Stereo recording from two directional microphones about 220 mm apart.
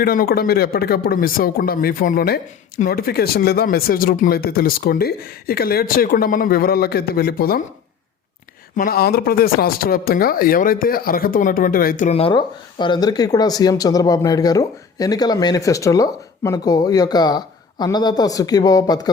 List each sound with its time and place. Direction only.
0.0 s speech: 40° left (ahead or behind)
8.7 s speech: 40° left (ahead or behind); by 19.1 s 15° left (ahead or behind)